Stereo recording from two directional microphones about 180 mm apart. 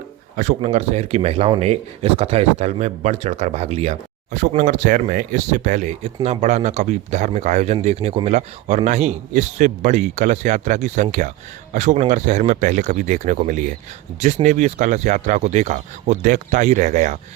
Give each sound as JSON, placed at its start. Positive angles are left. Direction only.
{"t": 0.3, "sound": "speech", "side_deg": -40}